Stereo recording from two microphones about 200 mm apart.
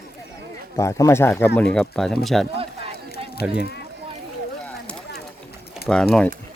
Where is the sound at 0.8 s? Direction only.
15° left (ahead or behind); by 3.6 s 5° right (ahead or behind).